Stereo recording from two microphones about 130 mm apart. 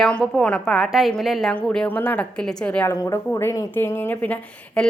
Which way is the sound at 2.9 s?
20° left (ahead or behind).